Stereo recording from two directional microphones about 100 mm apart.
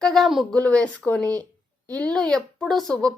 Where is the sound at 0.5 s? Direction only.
10° left (ahead or behind).